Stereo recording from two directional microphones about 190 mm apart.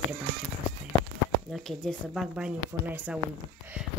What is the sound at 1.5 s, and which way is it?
Speech, centre (ahead or behind).